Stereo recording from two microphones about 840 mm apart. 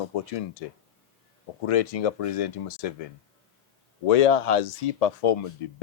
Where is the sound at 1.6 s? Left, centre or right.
Left.